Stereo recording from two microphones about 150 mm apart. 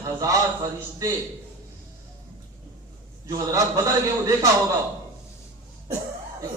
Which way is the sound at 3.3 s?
20° right (ahead or behind).